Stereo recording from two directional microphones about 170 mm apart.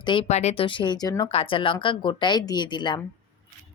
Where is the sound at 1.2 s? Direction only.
35° left (ahead or behind).